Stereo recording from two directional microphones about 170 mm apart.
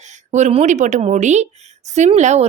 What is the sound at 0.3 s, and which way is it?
A woman's voice, 40° right (ahead or behind).